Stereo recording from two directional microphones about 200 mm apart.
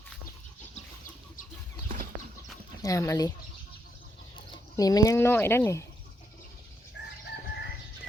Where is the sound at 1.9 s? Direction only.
40° right (ahead or behind).